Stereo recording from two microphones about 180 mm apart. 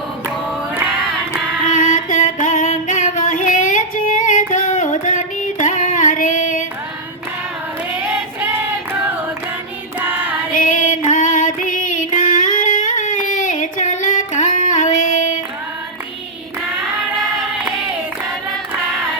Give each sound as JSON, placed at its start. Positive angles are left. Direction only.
{"t": 1.7, "sound": "music", "side_deg": 45}
{"t": 10.0, "sound": "child singing", "side_deg": -10}
{"t": 10.5, "sound": "female singing", "side_deg": 45}